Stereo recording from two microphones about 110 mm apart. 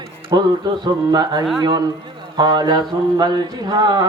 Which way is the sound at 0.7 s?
40° right (ahead or behind).